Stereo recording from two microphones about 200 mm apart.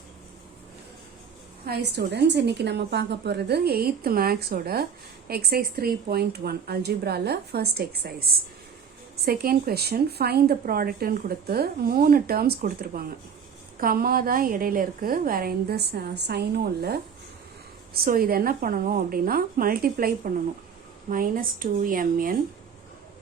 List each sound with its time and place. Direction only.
1.6 s a woman's voice: 55° right (ahead or behind)